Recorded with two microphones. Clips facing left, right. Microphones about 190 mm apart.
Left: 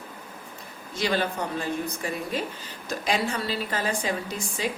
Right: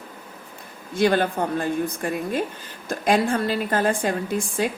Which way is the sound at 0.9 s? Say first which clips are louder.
Right 6 dB; 55° right (ahead or behind).